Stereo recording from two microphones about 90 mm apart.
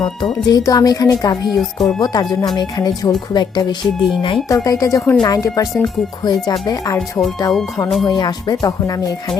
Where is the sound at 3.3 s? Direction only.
55° left (ahead or behind).